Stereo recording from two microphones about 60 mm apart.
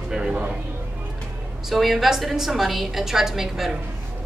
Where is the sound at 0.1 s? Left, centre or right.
Centre.